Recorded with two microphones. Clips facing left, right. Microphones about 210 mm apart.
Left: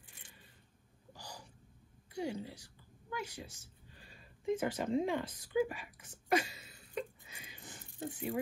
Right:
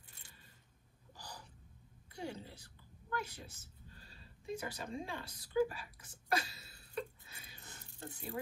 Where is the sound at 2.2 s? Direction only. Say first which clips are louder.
Left 6 dB; 10° left (ahead or behind).